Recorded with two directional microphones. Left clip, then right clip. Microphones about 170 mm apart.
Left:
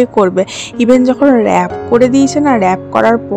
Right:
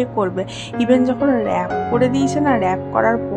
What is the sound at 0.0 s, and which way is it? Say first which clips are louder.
Speech: left 10 dB; 40° left (ahead or behind).